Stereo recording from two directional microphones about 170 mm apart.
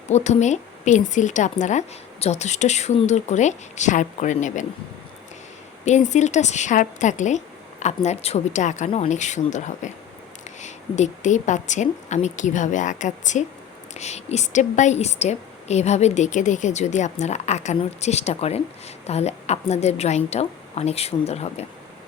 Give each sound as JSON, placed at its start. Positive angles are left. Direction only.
{"t": 0.1, "sound": "a woman's voice", "side_deg": 45}
{"t": 5.8, "sound": "a woman's voice", "side_deg": 45}